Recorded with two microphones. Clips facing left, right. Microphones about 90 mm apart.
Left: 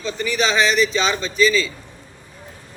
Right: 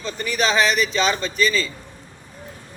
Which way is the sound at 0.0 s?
45° right (ahead or behind).